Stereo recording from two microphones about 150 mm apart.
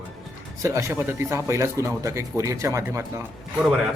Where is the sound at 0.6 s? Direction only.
20° right (ahead or behind).